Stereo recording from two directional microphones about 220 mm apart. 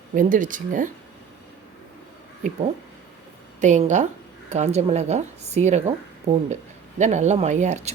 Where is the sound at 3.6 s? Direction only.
35° right (ahead or behind).